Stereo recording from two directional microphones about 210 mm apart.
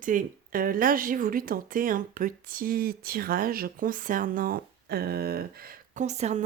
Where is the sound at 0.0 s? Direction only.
40° right (ahead or behind).